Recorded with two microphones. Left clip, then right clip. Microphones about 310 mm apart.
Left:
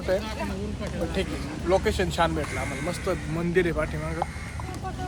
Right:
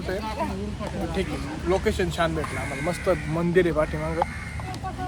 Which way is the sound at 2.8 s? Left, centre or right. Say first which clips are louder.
Right 9 dB; centre.